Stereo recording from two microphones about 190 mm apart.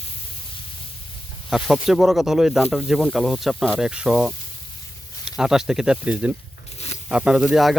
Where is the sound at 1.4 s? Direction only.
Centre (ahead or behind).